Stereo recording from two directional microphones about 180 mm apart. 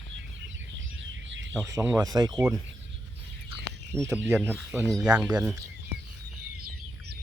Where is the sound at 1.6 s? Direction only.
15° right (ahead or behind).